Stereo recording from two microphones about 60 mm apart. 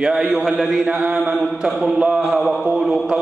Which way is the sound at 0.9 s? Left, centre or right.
Centre.